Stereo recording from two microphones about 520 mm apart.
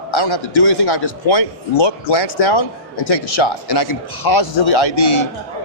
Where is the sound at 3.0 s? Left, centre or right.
Left.